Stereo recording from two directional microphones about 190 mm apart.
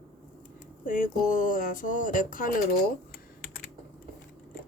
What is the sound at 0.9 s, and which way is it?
Speech, 45° left (ahead or behind).